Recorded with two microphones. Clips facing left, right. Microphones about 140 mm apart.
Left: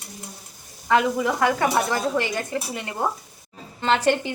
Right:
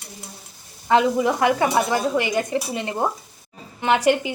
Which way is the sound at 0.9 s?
20° right (ahead or behind).